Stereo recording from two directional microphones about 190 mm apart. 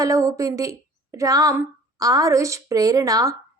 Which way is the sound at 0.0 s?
15° right (ahead or behind).